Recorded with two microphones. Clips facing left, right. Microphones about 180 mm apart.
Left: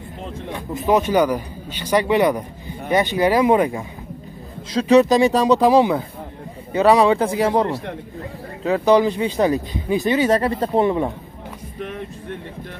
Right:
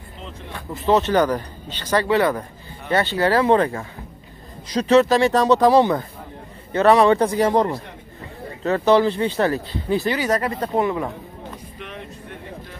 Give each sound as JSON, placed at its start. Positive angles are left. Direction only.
{"t": 0.5, "sound": "speech", "side_deg": 15}
{"t": 4.8, "sound": "speech", "side_deg": 15}
{"t": 8.6, "sound": "speech", "side_deg": 10}